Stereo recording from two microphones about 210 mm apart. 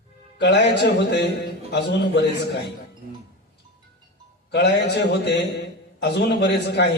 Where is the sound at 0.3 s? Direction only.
55° left (ahead or behind).